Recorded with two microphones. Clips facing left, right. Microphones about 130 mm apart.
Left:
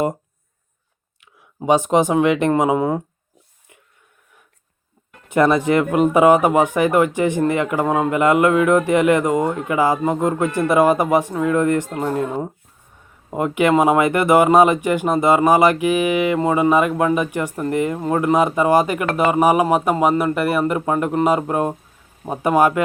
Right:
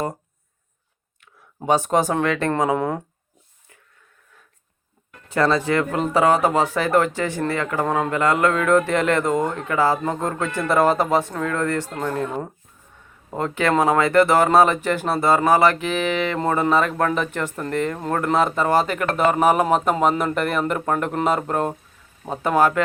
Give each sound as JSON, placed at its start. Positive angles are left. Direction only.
{"t": 1.6, "sound": "speech", "side_deg": 15}
{"t": 2.7, "sound": "speech", "side_deg": 5}
{"t": 5.3, "sound": "speech", "side_deg": 20}